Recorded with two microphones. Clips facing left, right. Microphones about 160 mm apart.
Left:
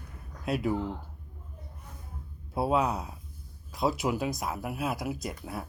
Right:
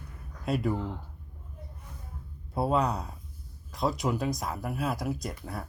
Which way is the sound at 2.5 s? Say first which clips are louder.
Even; 5° left (ahead or behind).